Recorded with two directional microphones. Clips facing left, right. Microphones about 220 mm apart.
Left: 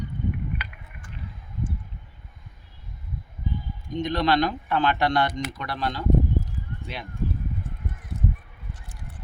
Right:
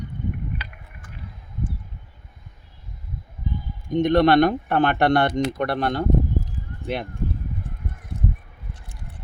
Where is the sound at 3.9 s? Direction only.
55° right (ahead or behind).